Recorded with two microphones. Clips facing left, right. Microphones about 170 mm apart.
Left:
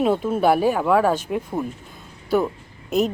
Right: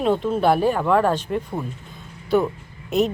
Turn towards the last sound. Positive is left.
turn(degrees=0)  # may be behind; listen again after turning